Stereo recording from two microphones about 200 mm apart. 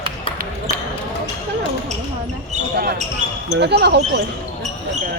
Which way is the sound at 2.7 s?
45° right (ahead or behind).